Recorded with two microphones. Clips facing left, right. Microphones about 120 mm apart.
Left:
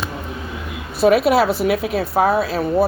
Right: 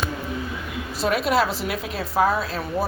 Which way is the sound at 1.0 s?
65° left (ahead or behind).